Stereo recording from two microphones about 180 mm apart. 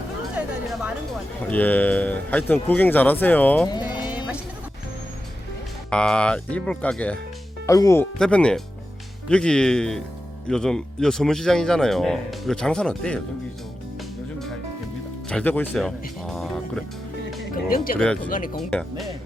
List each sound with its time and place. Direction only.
0.3 s chatter: 5° right (ahead or behind)
1.4 s speech: 10° left (ahead or behind)
3.7 s music: 25° left (ahead or behind)
5.9 s speech: 5° left (ahead or behind)
7.7 s speech: 20° left (ahead or behind)
8.2 s speech: 5° left (ahead or behind)
15.3 s speech: 5° left (ahead or behind)
17.5 s speech: 50° left (ahead or behind)
17.9 s speech: 5° left (ahead or behind)
18.3 s speech: 50° left (ahead or behind)
18.7 s speech: 5° left (ahead or behind)